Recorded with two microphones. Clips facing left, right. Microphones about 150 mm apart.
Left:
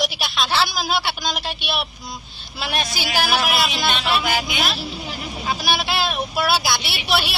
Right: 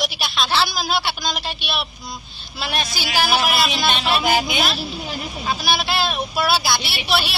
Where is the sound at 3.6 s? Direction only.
15° left (ahead or behind).